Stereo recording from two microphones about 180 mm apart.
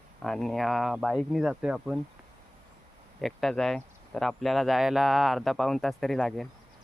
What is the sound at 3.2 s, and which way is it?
Speech, centre (ahead or behind).